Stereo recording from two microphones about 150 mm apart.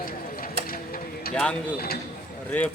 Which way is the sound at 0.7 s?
75° left (ahead or behind).